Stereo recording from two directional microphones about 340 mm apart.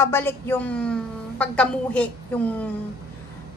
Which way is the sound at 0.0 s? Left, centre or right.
Centre.